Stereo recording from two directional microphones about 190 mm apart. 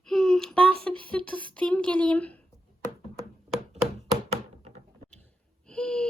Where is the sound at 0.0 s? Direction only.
5° left (ahead or behind).